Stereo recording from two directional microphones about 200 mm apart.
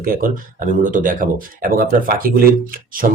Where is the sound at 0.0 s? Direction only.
45° right (ahead or behind).